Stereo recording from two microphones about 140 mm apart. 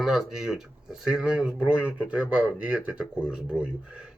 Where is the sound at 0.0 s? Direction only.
Centre (ahead or behind).